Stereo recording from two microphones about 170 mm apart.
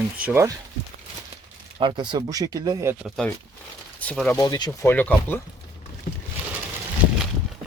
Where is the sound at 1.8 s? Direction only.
30° right (ahead or behind).